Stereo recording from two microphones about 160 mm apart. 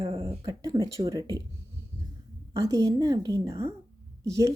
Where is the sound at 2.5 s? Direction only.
20° right (ahead or behind).